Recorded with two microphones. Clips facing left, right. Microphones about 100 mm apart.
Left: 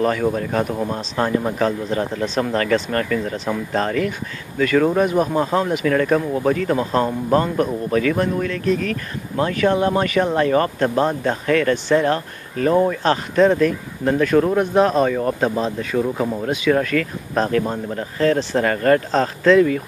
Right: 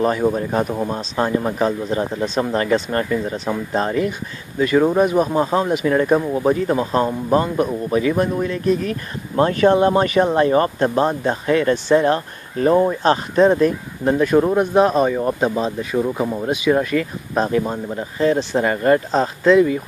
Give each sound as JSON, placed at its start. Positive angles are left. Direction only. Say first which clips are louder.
{"t": 0.0, "sound": "speech", "louder": "right 1 dB", "side_deg": -20}
{"t": 9.4, "sound": "speech", "louder": "right 4 dB", "side_deg": -35}